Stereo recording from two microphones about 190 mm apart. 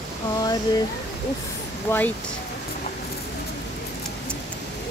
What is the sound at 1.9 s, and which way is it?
Speech, 10° left (ahead or behind).